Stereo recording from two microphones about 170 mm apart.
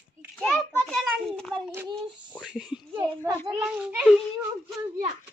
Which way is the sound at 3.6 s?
5° right (ahead or behind).